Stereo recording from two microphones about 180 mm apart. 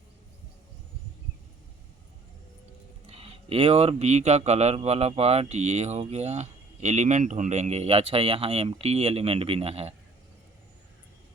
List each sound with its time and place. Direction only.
3.1 s speech: 35° right (ahead or behind)